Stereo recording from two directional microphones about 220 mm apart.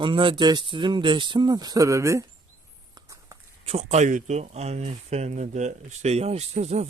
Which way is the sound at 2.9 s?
15° right (ahead or behind).